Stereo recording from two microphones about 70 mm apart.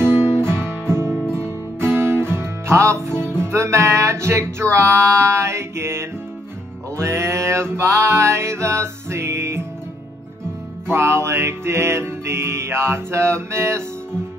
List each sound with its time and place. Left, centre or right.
0.0 s guitar: right
1.3 s music: right
10.9 s music: right